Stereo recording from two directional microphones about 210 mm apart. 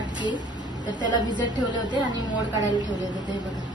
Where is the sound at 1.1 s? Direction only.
20° left (ahead or behind).